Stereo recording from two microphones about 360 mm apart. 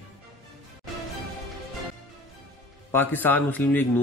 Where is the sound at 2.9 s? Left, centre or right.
Centre.